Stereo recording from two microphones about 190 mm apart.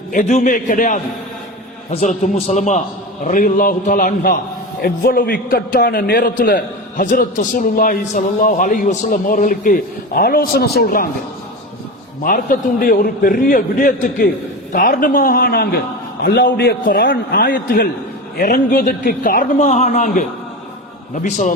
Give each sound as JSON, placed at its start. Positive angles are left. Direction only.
{"t": 0.1, "sound": "a man's voice", "side_deg": 40}
{"t": 12.2, "sound": "a man's voice", "side_deg": 45}